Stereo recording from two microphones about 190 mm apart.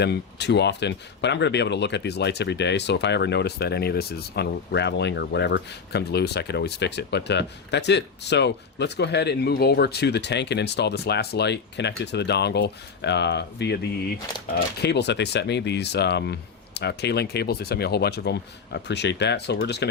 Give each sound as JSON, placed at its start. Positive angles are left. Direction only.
{"t": 0.0, "sound": "speech", "side_deg": 60}
{"t": 14.8, "sound": "speech", "side_deg": 65}